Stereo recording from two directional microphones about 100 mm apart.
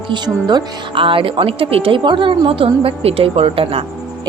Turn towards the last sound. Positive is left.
turn(degrees=-70)  # may be behind; listen again after turning